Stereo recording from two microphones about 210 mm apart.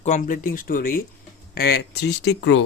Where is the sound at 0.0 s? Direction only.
35° left (ahead or behind).